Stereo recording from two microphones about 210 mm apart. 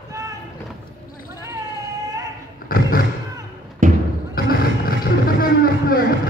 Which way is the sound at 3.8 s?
40° right (ahead or behind).